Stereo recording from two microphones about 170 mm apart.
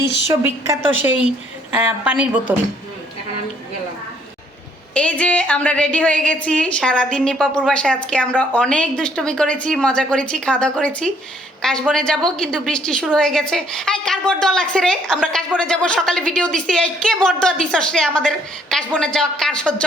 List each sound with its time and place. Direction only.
0.0 s a woman's voice: 90° left
0.4 s a woman's voice: 10° right (ahead or behind)
4.9 s a woman's voice: 10° left (ahead or behind)